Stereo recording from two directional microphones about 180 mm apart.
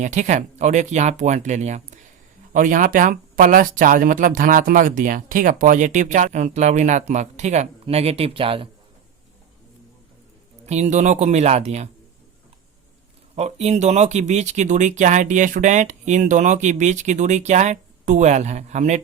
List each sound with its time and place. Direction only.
0.0 s speech: 40° right (ahead or behind)
10.7 s speech: 40° right (ahead or behind)
13.3 s speech: 35° right (ahead or behind)